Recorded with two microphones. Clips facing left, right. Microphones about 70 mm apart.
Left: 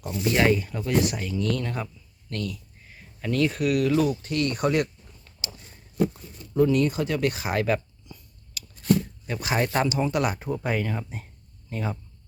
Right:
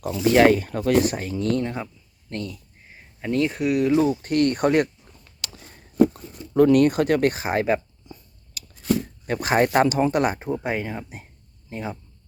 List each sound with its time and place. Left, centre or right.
0.0 s speech: right
0.3 s speech: right
0.9 s speech: right
1.6 s speech: right
4.2 s speech: right
6.1 s zipper: right
6.6 s speech: right
8.8 s a sound: centre
9.2 s speech: right; by 11.9 s centre